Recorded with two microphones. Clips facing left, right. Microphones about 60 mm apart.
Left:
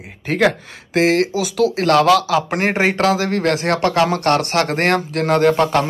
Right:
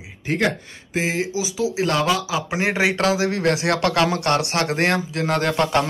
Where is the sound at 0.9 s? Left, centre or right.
Left.